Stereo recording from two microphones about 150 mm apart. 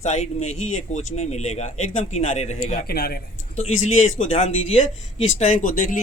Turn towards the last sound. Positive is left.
turn(degrees=65)  # may be behind; listen again after turning